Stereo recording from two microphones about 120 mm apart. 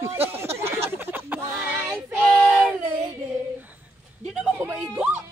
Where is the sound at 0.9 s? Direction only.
20° right (ahead or behind).